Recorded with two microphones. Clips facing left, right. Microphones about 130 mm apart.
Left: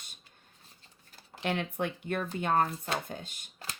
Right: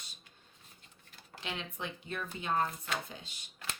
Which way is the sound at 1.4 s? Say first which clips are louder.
Left 9 dB; 55° left (ahead or behind).